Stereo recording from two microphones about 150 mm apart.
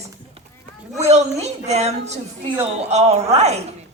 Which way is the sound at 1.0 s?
45° right (ahead or behind).